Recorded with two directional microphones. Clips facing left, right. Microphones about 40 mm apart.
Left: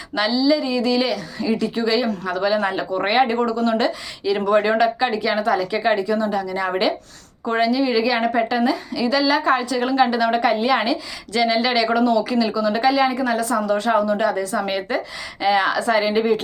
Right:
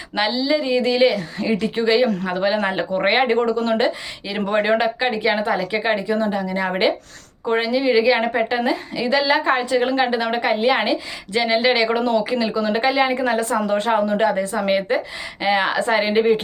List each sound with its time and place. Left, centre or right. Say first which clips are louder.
0.2 s a woman's voice: left 1 dB; right